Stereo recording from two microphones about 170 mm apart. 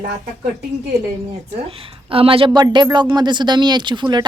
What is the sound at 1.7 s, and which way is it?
Speech, 35° right (ahead or behind).